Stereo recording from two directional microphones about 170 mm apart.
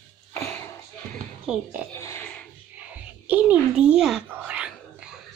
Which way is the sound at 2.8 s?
10° right (ahead or behind).